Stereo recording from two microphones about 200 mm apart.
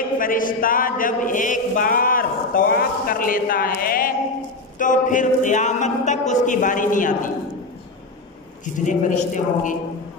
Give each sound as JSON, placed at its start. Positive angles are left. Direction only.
{"t": 0.2, "sound": "a sound", "side_deg": 45}
{"t": 4.7, "sound": "speech", "side_deg": 40}
{"t": 8.6, "sound": "speech", "side_deg": 40}